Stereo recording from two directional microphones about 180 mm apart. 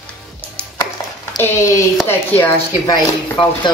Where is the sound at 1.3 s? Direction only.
15° left (ahead or behind).